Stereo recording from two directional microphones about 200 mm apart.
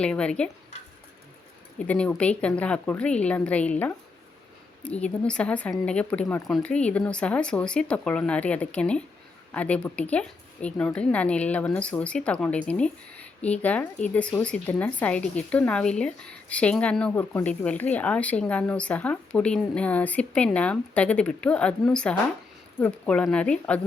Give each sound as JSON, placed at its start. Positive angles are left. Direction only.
{"t": 0.0, "sound": "speech", "side_deg": 5}
{"t": 1.9, "sound": "speech", "side_deg": 5}